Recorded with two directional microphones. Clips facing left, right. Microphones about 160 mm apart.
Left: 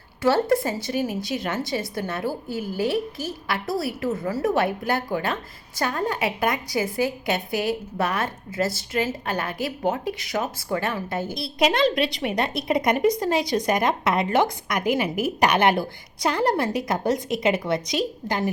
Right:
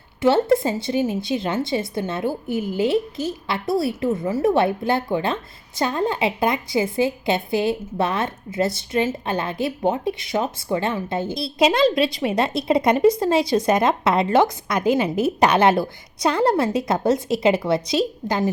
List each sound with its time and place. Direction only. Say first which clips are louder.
0.2 s a woman's voice: right 3 dB; 25° right (ahead or behind)